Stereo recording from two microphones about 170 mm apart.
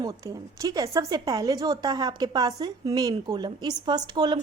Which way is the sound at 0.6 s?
20° right (ahead or behind).